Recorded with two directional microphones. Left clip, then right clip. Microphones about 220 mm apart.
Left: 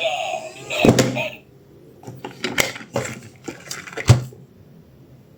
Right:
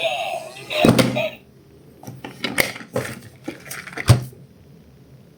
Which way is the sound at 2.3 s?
Centre (ahead or behind).